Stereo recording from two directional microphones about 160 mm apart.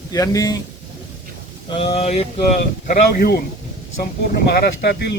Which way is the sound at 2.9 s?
70° left (ahead or behind).